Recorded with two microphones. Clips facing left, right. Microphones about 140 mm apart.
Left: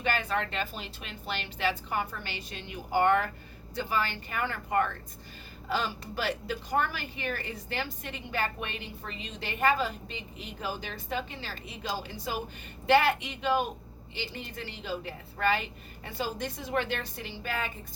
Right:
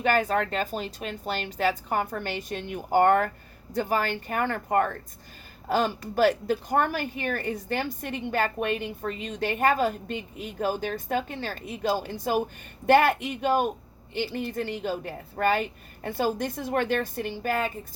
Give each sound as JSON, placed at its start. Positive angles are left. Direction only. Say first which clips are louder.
{"t": 0.0, "sound": "a woman's voice", "louder": "right 7 dB", "side_deg": -45}